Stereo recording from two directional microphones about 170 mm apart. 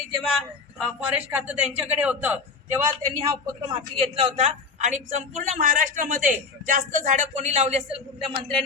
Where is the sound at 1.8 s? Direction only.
5° right (ahead or behind).